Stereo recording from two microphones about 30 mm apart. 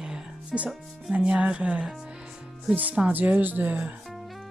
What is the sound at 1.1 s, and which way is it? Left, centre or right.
Speech, right.